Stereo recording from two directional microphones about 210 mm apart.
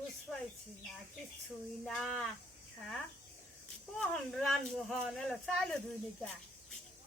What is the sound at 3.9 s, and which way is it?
Speech, 5° left (ahead or behind).